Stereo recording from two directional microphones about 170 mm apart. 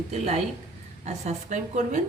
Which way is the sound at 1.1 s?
45° right (ahead or behind).